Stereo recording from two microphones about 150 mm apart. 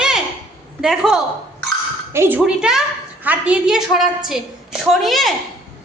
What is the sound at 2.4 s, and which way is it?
A woman's voice, 5° right (ahead or behind).